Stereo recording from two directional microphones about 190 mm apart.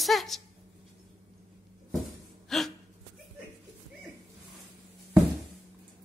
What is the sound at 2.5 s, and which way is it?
Gasp, centre (ahead or behind).